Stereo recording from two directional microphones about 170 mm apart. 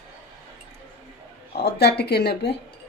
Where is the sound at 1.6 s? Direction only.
75° left (ahead or behind).